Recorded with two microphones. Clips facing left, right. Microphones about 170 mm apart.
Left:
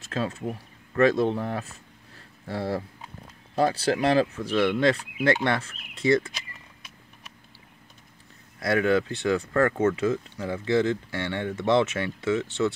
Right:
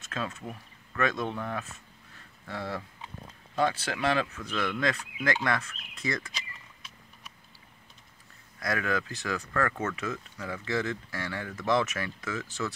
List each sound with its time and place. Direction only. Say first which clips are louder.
0.0 s speech: left 6 dB; 30° left (ahead or behind)
8.5 s speech: left 8 dB; 30° left (ahead or behind)